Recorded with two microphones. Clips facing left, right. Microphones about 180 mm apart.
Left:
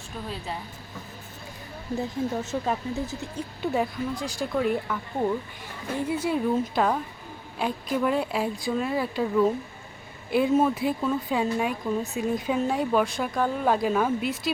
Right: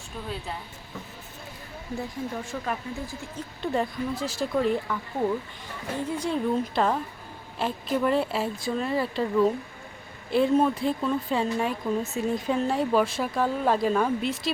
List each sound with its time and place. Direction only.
2.0 s speech: 20° left (ahead or behind)
3.6 s speech: 5° left (ahead or behind)
6.0 s a woman's voice: 10° left (ahead or behind)